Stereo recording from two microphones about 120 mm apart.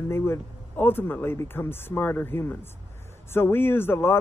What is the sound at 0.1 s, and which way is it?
Speech, 20° left (ahead or behind).